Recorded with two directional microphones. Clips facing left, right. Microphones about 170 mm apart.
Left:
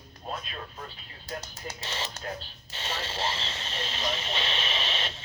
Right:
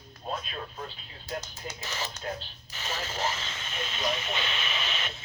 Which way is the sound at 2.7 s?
30° left (ahead or behind).